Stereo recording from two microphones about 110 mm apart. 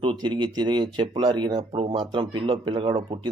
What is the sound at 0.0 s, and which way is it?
Speech, 50° right (ahead or behind).